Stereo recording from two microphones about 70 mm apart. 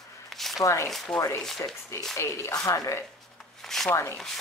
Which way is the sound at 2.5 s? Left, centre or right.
Left.